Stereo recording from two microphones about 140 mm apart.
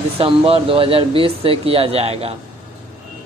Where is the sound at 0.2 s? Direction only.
40° right (ahead or behind).